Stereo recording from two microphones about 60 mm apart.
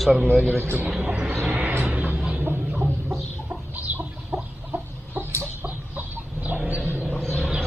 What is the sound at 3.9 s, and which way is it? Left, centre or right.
Chicken, right.